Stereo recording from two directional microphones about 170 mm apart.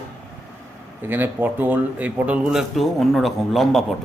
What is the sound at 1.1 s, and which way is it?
Speech, 10° right (ahead or behind).